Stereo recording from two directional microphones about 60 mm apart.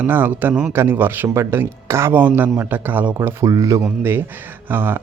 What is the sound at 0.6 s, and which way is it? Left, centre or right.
Speech, right.